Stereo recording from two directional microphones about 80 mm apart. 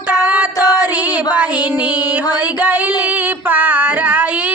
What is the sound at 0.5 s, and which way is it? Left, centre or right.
Music, left.